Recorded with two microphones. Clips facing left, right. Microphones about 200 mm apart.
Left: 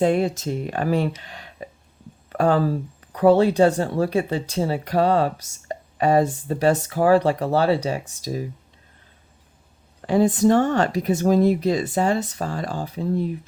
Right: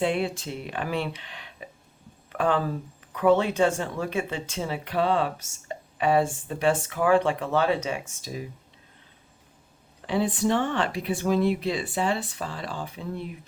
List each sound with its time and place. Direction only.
0.0 s speech: 45° left (ahead or behind)
10.1 s speech: 45° left (ahead or behind)